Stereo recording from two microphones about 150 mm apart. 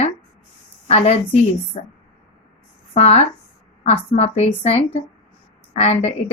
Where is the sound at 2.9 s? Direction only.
45° left (ahead or behind).